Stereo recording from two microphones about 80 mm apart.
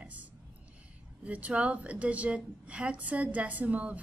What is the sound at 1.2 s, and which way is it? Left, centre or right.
A woman's voice, centre.